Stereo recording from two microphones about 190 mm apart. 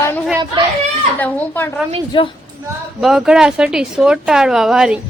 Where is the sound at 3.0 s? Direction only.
Centre (ahead or behind).